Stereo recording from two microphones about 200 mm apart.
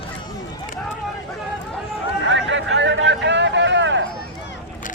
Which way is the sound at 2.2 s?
65° right (ahead or behind).